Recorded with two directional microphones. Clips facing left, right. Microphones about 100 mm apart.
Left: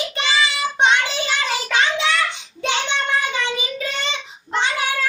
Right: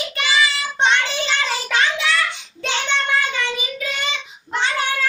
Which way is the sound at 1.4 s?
20° left (ahead or behind).